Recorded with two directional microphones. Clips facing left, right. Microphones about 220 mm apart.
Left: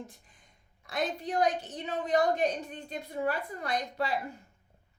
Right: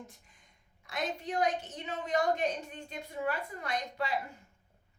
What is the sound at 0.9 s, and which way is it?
A woman's voice, 35° left (ahead or behind).